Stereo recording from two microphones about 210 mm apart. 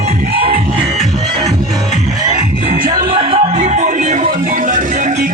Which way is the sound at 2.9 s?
25° right (ahead or behind).